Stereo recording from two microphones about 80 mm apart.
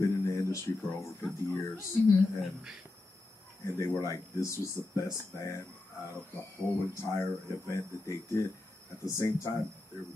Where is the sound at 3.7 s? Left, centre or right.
Left.